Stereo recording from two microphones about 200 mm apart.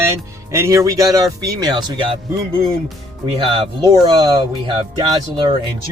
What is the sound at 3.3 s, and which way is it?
Speech, 25° right (ahead or behind).